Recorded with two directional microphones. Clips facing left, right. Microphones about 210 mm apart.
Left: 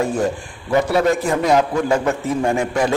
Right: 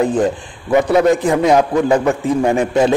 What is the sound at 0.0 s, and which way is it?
A man's voice, 20° right (ahead or behind).